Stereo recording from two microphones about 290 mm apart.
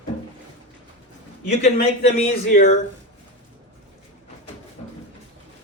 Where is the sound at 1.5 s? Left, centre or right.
Left.